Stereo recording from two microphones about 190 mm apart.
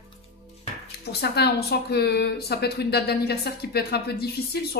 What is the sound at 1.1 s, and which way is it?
A woman's voice, 60° left (ahead or behind).